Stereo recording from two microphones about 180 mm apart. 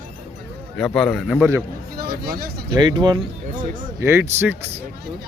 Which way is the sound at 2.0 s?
55° right (ahead or behind).